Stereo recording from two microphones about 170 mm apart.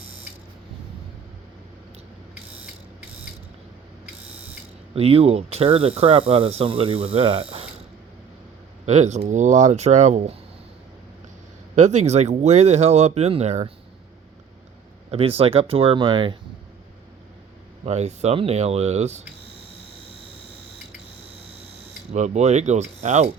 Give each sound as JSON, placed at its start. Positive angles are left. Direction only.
{"t": 4.9, "sound": "speech", "side_deg": -35}
{"t": 8.9, "sound": "speech", "side_deg": -45}
{"t": 11.7, "sound": "speech", "side_deg": -45}
{"t": 15.4, "sound": "speech", "side_deg": -35}
{"t": 17.8, "sound": "speech", "side_deg": -40}
{"t": 22.1, "sound": "speech", "side_deg": -45}